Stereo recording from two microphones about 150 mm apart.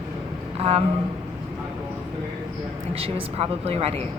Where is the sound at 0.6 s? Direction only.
40° right (ahead or behind).